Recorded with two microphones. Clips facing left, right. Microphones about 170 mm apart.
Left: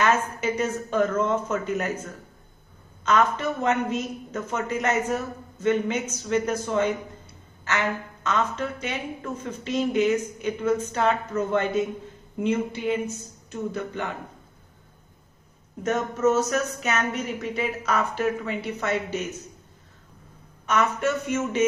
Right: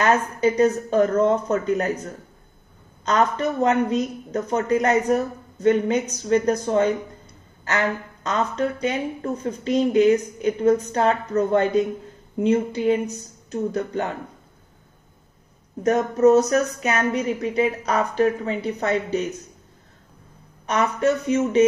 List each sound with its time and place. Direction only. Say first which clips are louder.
0.0 s a woman's voice: right 4 dB; 35° right (ahead or behind)
3.1 s a woman's voice: right 2 dB; 35° right (ahead or behind)
15.8 s a woman's voice: right 6 dB; 35° right (ahead or behind)
20.6 s a woman's voice: right 3 dB; 35° right (ahead or behind)